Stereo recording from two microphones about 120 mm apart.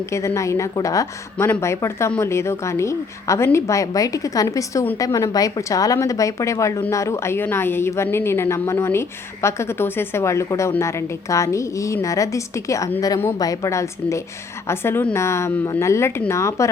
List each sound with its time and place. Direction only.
0.1 s a woman's voice: 25° left (ahead or behind)